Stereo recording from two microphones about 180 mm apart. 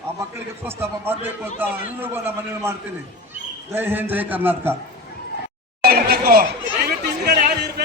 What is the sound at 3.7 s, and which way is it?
A man's voice, 10° right (ahead or behind).